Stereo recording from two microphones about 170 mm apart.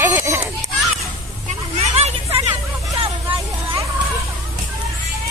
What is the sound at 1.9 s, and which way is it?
Vehicle, 40° right (ahead or behind).